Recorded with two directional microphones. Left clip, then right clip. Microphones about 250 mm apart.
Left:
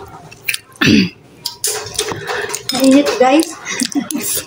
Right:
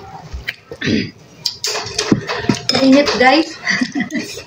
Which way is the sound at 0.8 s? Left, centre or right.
Left.